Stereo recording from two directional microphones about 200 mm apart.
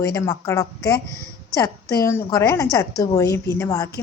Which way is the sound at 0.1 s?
15° left (ahead or behind).